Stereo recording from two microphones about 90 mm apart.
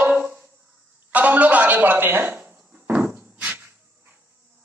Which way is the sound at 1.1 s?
15° right (ahead or behind).